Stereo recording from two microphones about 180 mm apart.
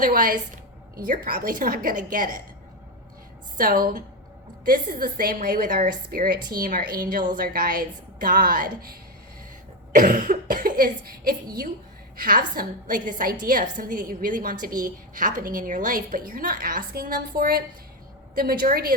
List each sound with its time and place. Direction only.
0.0 s a woman's voice: 50° right (ahead or behind)
3.6 s a woman's voice: 55° right (ahead or behind)